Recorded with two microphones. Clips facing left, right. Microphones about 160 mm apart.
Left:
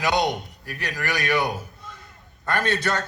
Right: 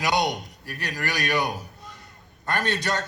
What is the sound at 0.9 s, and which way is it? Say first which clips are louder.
A man's voice: left 2 dB; 20° right (ahead or behind).